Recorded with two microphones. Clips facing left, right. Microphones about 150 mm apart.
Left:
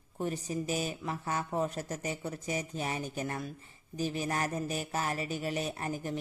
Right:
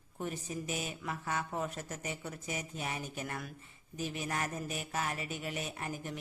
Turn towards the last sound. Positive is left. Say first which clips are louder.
# left 5 dB
turn(degrees=35)  # may be behind; listen again after turning